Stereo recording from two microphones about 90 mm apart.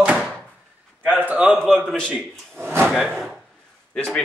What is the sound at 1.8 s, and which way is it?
Speech, 10° left (ahead or behind).